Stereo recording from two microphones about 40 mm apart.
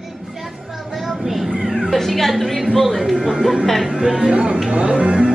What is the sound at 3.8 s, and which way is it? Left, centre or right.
Speech, centre.